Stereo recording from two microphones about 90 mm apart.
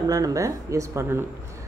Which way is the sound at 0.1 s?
40° right (ahead or behind).